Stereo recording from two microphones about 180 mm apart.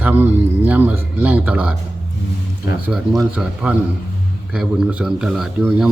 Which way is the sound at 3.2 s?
5° right (ahead or behind).